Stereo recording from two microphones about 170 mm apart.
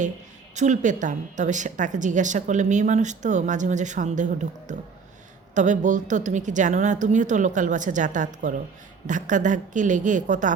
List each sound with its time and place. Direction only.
0.5 s a woman's voice: 45° right (ahead or behind)